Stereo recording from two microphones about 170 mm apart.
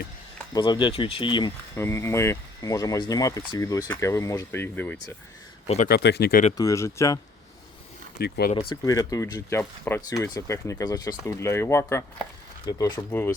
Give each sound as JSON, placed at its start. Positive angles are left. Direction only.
{"t": 0.5, "sound": "speech", "side_deg": 25}
{"t": 1.7, "sound": "speech", "side_deg": 15}
{"t": 5.6, "sound": "speech", "side_deg": 40}
{"t": 5.9, "sound": "speech", "side_deg": 75}
{"t": 6.6, "sound": "speech", "side_deg": 20}
{"t": 8.2, "sound": "speech", "side_deg": 65}
{"t": 8.7, "sound": "speech", "side_deg": 20}